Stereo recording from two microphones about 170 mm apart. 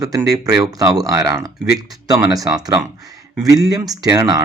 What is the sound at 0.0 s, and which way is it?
Speech, 20° right (ahead or behind).